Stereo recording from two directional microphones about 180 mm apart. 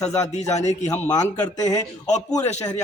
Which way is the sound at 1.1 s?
20° left (ahead or behind).